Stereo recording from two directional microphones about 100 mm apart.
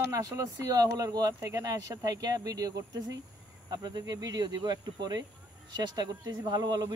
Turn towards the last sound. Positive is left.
turn(degrees=-45)  # may be behind; listen again after turning